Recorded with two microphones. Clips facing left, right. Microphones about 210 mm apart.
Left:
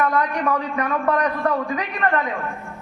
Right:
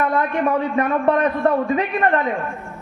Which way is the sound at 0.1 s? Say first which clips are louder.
Right 2 dB; 25° right (ahead or behind).